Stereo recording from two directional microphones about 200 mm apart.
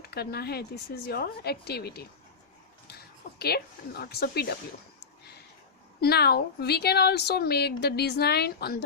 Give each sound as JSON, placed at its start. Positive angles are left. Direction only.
{"t": 0.1, "sound": "a woman's voice", "side_deg": 50}
{"t": 3.3, "sound": "a woman's voice", "side_deg": 50}
{"t": 6.0, "sound": "a woman's voice", "side_deg": 55}